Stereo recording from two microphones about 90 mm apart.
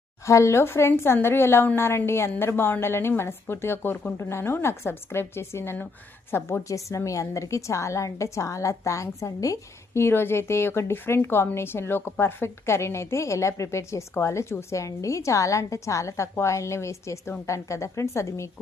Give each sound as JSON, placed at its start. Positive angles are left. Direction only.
{"t": 0.3, "sound": "a woman's voice", "side_deg": 35}